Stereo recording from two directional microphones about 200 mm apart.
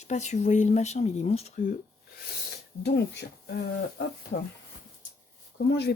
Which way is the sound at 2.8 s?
55° left (ahead or behind).